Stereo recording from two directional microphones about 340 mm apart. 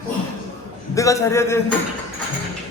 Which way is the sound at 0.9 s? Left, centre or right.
Centre.